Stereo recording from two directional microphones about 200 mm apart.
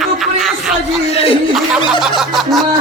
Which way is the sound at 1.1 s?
30° left (ahead or behind).